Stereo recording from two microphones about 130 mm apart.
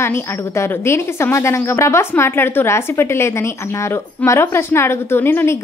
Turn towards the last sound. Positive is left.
turn(degrees=20)  # may be behind; listen again after turning